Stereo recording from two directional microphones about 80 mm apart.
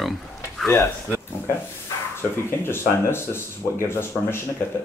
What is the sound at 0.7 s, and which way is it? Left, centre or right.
Speech, left.